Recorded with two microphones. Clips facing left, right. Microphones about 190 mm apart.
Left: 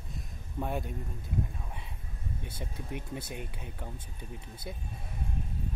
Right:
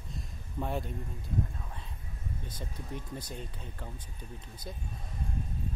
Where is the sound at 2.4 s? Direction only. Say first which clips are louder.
Left 1 dB; 10° left (ahead or behind).